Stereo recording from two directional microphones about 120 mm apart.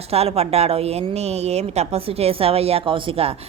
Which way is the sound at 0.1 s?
60° right (ahead or behind).